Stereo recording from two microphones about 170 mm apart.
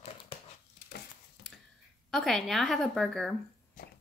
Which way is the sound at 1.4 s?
70° left (ahead or behind).